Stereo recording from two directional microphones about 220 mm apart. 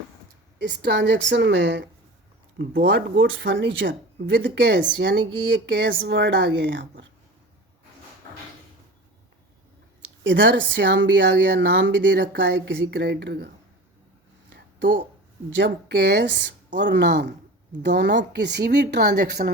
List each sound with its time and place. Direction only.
0.6 s a woman's voice: 50° right (ahead or behind)
10.2 s a woman's voice: 55° right (ahead or behind)
14.5 s a sound: 50° right (ahead or behind)
15.5 s speech: 55° right (ahead or behind)